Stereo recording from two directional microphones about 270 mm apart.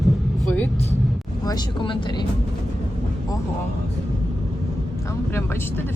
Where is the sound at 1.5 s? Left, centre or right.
Centre.